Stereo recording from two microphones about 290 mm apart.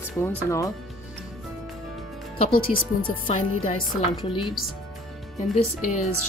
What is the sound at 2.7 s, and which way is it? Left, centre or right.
Speech, centre.